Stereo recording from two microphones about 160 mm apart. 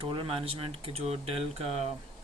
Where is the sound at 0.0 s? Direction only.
35° right (ahead or behind).